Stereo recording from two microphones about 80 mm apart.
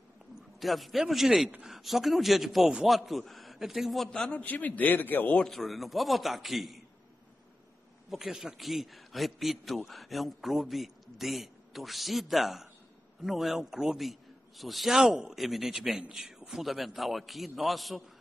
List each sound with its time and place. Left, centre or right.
0.6 s a man's voice: centre
4.2 s a man's voice: centre
5.5 s a man's voice: centre
8.1 s a man's voice: centre